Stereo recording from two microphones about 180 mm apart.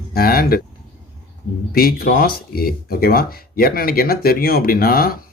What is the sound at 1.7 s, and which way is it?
Speech, 55° left (ahead or behind).